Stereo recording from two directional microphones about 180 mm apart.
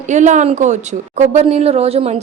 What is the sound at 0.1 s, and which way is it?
Speech, 40° right (ahead or behind).